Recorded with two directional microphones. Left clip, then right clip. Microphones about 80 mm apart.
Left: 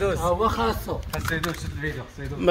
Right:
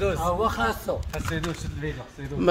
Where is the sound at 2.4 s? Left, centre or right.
Right.